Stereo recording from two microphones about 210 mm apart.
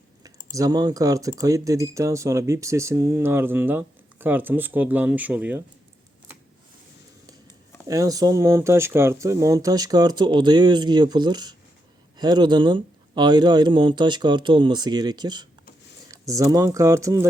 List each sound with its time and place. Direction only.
0.2 s speech: 15° right (ahead or behind)
7.9 s speech: 15° right (ahead or behind)